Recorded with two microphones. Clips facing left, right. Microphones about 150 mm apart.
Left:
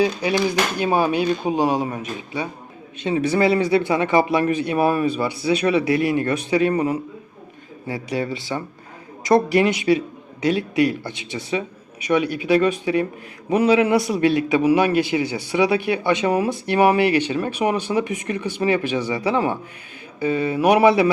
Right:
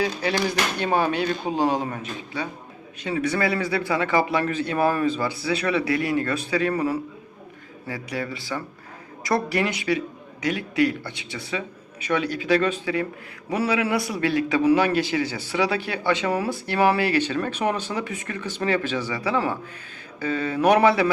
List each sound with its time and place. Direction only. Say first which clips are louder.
0.0 s a man's voice: left 4 dB; 15° left (ahead or behind)